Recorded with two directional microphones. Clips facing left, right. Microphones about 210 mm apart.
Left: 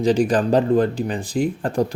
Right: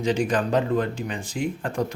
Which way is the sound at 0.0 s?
35° left (ahead or behind).